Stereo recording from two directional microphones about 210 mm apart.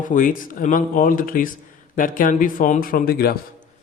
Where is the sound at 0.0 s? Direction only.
40° left (ahead or behind).